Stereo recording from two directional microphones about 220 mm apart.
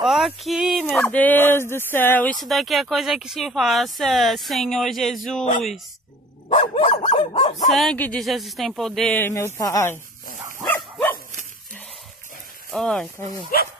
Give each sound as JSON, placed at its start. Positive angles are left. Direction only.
{"t": 0.0, "sound": "speech", "side_deg": 0}
{"t": 5.4, "sound": "dog", "side_deg": 35}
{"t": 7.7, "sound": "speech", "side_deg": 5}
{"t": 10.6, "sound": "dog", "side_deg": 5}
{"t": 12.7, "sound": "speech", "side_deg": 0}